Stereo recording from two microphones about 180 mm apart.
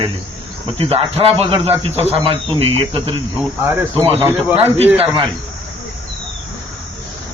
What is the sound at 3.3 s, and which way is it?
Cricket, 10° right (ahead or behind).